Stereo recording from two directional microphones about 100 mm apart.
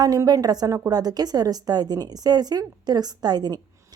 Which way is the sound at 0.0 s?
40° right (ahead or behind).